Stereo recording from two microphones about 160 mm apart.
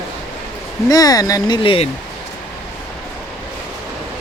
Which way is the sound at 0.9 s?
25° left (ahead or behind).